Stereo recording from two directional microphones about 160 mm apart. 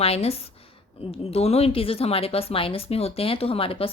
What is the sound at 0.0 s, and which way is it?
Speech, 40° left (ahead or behind).